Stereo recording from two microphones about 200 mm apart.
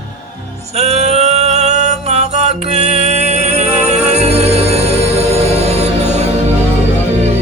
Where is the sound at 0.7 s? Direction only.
35° right (ahead or behind).